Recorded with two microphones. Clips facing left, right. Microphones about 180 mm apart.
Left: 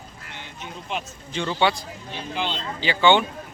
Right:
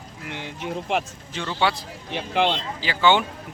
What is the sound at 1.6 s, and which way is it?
Speech, centre (ahead or behind).